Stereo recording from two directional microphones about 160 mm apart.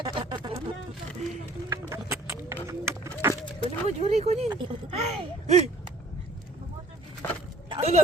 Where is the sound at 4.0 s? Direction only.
40° right (ahead or behind).